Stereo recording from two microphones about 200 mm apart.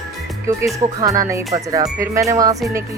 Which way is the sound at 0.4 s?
15° right (ahead or behind).